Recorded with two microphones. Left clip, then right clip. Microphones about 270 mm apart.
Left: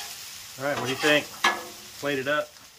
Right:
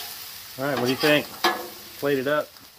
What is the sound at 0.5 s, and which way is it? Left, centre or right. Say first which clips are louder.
Speech: right 3 dB; right.